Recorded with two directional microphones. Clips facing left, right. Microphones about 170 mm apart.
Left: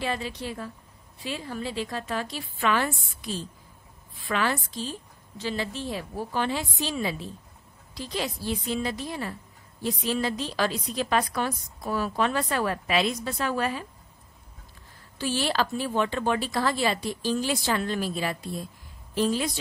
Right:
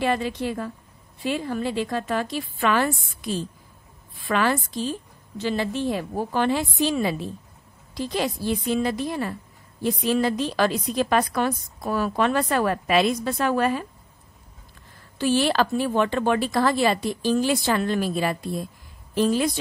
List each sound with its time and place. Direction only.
0.0 s a woman's voice: 55° right (ahead or behind)
15.1 s a woman's voice: 55° right (ahead or behind)